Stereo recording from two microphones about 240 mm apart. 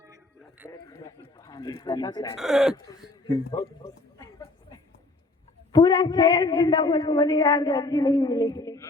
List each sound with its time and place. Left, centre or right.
0.7 s a man's voice: centre
2.4 s speech: centre
3.5 s a sound: centre
5.7 s a man's voice: centre